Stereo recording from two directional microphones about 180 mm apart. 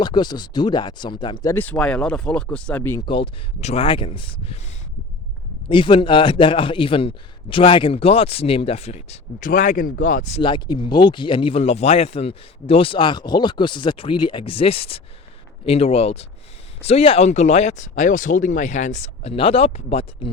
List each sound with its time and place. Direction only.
0.0 s speech: 25° left (ahead or behind)
3.1 s speech: 35° left (ahead or behind)
5.6 s speech: 30° left (ahead or behind); by 10.4 s 45° left (ahead or behind)
10.4 s speech: 25° left (ahead or behind)